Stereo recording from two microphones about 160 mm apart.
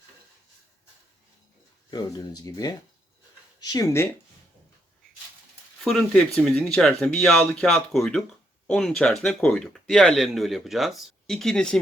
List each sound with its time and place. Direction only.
1.9 s speech: 25° left (ahead or behind)
5.8 s speech: 5° left (ahead or behind)